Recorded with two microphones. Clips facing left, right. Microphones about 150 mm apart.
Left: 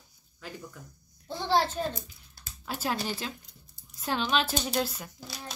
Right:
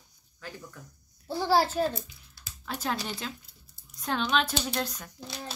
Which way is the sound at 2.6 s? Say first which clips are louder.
Left 1 dB; 5° left (ahead or behind).